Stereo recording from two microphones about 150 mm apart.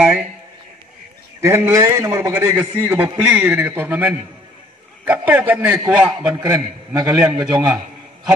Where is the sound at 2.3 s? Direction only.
10° right (ahead or behind).